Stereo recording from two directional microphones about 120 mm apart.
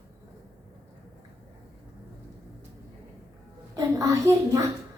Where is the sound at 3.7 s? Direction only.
30° right (ahead or behind).